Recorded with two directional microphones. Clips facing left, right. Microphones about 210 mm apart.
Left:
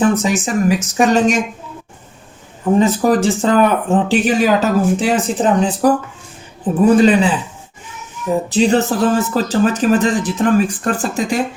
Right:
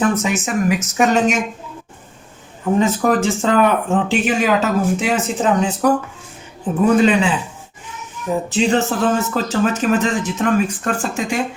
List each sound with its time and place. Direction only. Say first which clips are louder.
0.0 s speech: left 3 dB; 30° left (ahead or behind)
2.7 s speech: left 3 dB; 35° left (ahead or behind)
7.0 s speech: left 3 dB; 35° left (ahead or behind)
8.4 s speech: left 3 dB; 40° left (ahead or behind)